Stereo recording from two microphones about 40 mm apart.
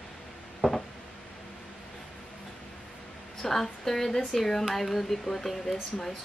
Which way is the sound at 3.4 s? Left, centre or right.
Centre.